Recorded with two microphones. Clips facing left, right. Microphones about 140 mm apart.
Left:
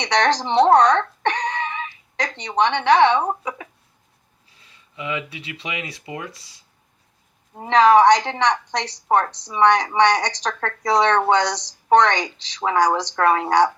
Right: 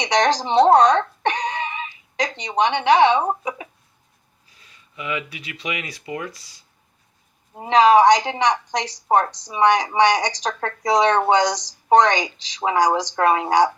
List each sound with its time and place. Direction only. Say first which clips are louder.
0.0 s speech: right 1 dB; 10° right (ahead or behind)
4.5 s speech: even; 25° left (ahead or behind)
7.5 s speech: even; 15° right (ahead or behind)